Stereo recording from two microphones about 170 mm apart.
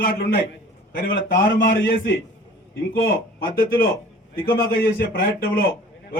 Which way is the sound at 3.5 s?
60° left (ahead or behind).